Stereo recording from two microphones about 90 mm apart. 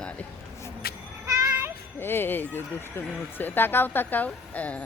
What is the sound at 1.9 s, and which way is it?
Speech, 25° left (ahead or behind).